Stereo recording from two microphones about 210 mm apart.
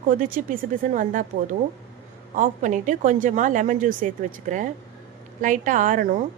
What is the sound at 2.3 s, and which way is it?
A woman's voice, 35° right (ahead or behind).